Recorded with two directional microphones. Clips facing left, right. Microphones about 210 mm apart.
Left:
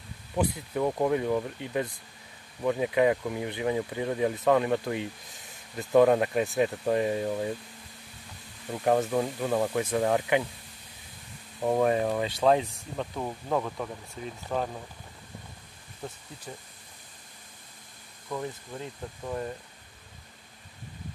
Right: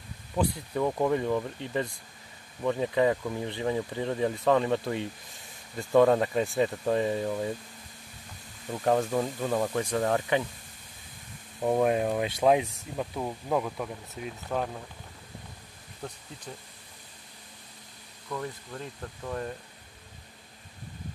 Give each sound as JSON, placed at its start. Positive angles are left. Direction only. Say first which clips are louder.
{"t": 0.4, "sound": "speech", "louder": "even", "side_deg": 10}
{"t": 8.8, "sound": "speech", "louder": "left 1 dB", "side_deg": 5}
{"t": 11.6, "sound": "speech", "louder": "even", "side_deg": -5}
{"t": 18.3, "sound": "speech", "louder": "left 1 dB", "side_deg": 15}